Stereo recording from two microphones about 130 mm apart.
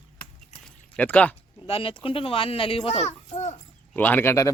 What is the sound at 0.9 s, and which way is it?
Speech, 10° left (ahead or behind).